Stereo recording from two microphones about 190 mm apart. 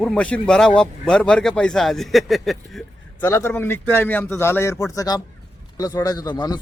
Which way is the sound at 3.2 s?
15° left (ahead or behind).